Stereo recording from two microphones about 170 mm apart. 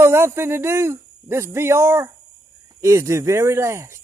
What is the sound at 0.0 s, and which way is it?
Speech, 15° right (ahead or behind).